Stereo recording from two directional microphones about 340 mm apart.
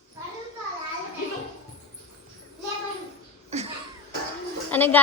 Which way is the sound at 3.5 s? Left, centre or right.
Centre.